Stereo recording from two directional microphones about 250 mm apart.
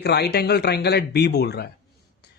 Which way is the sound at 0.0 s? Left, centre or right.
Left.